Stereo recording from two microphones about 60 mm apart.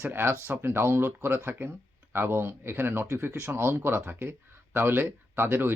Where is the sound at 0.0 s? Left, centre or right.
Right.